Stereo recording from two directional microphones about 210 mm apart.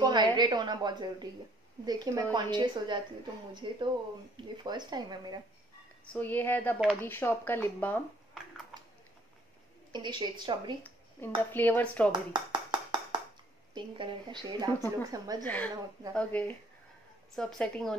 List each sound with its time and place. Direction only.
0.0 s speech: 20° right (ahead or behind)
6.1 s speech: 10° left (ahead or behind)
9.9 s speech: 20° right (ahead or behind)
10.8 s dishes: 10° left (ahead or behind)
11.5 s speech: 10° left (ahead or behind)
12.1 s dishes: 20° right (ahead or behind)
13.7 s speech: 20° right (ahead or behind)
15.4 s a woman's voice: 5° left (ahead or behind)